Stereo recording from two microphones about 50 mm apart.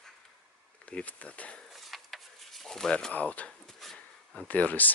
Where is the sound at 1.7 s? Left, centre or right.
Centre.